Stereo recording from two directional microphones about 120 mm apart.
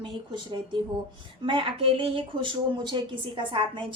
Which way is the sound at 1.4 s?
50° right (ahead or behind).